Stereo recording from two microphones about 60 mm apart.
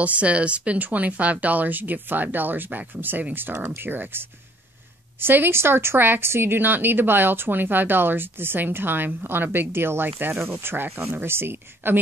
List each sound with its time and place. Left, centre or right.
0.0 s speech: right